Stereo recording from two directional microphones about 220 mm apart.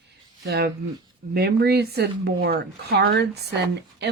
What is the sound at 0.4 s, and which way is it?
A woman's voice, 45° right (ahead or behind).